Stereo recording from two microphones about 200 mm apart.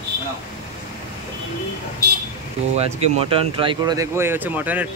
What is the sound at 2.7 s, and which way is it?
Speech, 30° right (ahead or behind).